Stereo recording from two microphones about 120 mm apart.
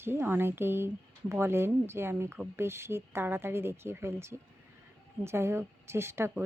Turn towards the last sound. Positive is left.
turn(degrees=-20)  # may be behind; listen again after turning